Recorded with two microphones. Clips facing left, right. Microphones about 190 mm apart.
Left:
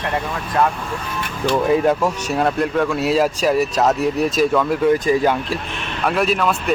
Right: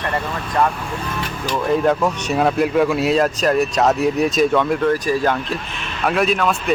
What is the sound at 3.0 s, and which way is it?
Speech, 5° left (ahead or behind).